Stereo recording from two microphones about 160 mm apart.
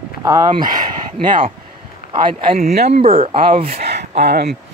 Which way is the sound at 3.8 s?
90° right.